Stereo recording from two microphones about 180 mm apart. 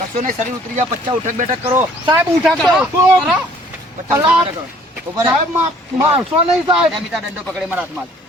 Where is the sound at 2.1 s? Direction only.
Centre (ahead or behind).